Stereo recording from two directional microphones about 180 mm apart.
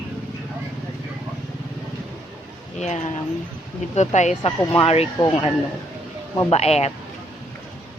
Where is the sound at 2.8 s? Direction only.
40° left (ahead or behind).